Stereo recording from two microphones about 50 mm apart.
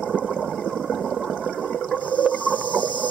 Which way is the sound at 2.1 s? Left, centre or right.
Left.